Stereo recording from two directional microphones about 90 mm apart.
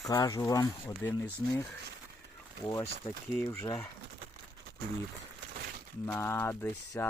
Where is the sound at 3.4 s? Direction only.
25° left (ahead or behind).